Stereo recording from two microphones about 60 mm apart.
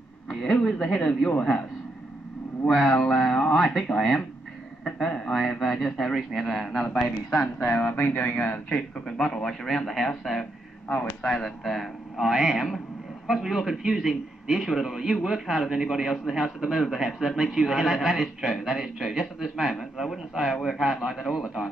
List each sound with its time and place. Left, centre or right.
0.3 s speech: centre
2.9 s a man's voice: centre
7.5 s speech: left
8.0 s speech: left
8.6 s a man's voice: centre